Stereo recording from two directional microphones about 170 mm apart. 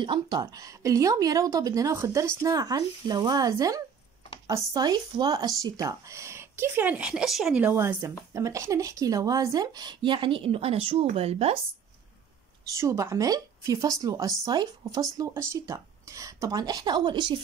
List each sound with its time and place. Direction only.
0.0 s speech: 25° right (ahead or behind)
12.7 s speech: 20° right (ahead or behind)